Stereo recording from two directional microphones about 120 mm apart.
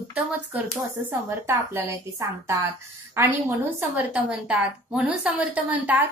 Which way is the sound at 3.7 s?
10° right (ahead or behind).